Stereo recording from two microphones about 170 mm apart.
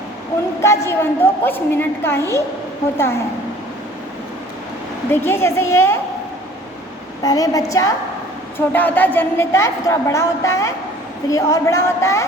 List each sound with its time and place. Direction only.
0.6 s a woman's voice: 15° left (ahead or behind)
5.1 s a woman's voice: 15° left (ahead or behind)
7.2 s a woman's voice: 20° left (ahead or behind)